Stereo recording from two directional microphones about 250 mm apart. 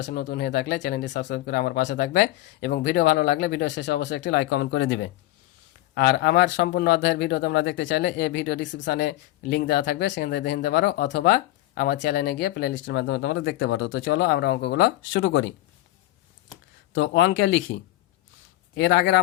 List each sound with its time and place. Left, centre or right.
0.0 s speech: left
17.0 s speech: left